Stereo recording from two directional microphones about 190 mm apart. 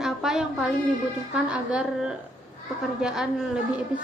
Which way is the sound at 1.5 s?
5° right (ahead or behind).